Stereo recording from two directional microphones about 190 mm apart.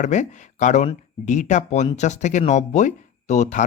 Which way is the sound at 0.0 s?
40° left (ahead or behind).